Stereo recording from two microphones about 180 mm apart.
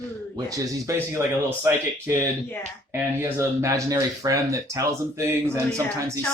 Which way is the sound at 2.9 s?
15° right (ahead or behind).